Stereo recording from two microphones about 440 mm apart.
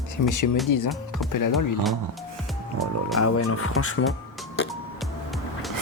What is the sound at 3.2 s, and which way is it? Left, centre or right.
Speech, left.